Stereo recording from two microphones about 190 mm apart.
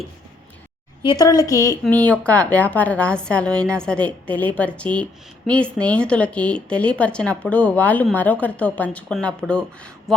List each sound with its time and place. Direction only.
1.0 s a woman's voice: 20° left (ahead or behind); by 10.2 s 5° left (ahead or behind)